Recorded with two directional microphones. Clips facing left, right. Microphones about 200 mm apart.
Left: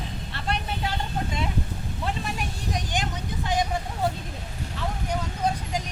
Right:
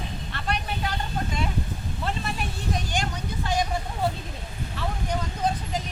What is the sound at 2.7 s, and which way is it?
Vehicle, 20° left (ahead or behind).